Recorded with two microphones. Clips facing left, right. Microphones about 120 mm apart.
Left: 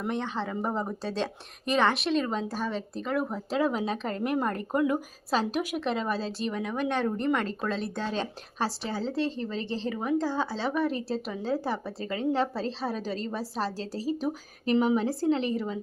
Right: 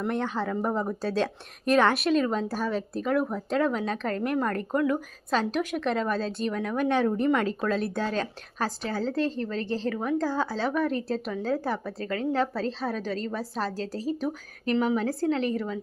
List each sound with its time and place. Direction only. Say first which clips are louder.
0.0 s speech: right 3 dB; centre (ahead or behind)
8.1 s speech: right 2 dB; 25° left (ahead or behind)
9.6 s a woman's voice: right 3 dB; 50° right (ahead or behind)
9.9 s speech: left 1 dB; 10° left (ahead or behind)
13.7 s a woman's voice: right 2 dB; 45° right (ahead or behind)
14.7 s speech: left 1 dB; 15° left (ahead or behind)